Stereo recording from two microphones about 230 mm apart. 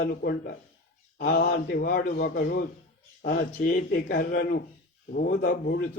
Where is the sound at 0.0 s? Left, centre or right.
Left.